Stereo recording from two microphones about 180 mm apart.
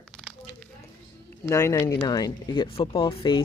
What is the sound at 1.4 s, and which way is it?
Speech, 15° left (ahead or behind).